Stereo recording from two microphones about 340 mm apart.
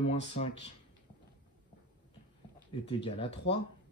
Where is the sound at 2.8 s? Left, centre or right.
Centre.